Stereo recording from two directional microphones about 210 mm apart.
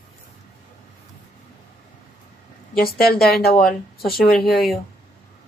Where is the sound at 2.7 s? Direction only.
45° left (ahead or behind).